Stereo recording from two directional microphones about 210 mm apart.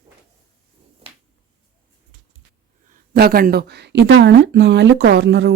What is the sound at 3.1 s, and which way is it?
Speech, 45° right (ahead or behind).